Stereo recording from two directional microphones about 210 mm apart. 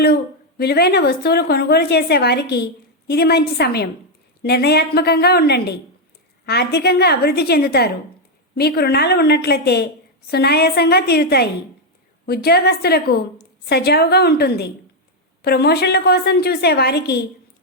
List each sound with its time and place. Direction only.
0.6 s a woman's voice: 50° left (ahead or behind)